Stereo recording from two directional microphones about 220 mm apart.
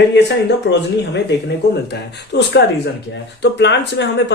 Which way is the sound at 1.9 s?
50° left (ahead or behind).